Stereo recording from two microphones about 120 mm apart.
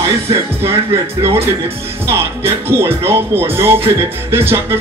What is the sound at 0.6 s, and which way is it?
Music, 20° right (ahead or behind).